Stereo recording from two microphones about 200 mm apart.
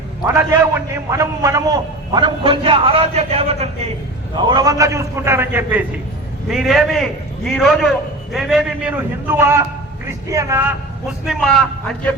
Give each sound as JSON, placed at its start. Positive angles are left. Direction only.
{"t": 0.3, "sound": "a man's voice", "side_deg": -15}
{"t": 11.3, "sound": "a man's voice", "side_deg": 0}